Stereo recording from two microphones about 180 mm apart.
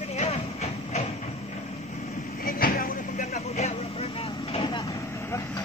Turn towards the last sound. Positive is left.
turn(degrees=30)  # may be behind; listen again after turning